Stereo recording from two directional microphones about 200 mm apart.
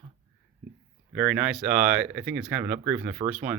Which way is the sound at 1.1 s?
5° right (ahead or behind).